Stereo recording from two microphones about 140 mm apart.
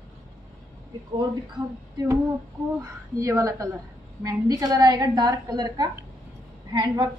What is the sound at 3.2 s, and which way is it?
A woman's voice, 25° right (ahead or behind).